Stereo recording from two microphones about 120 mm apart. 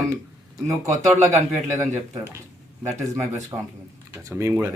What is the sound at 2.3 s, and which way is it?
Speech, 25° right (ahead or behind).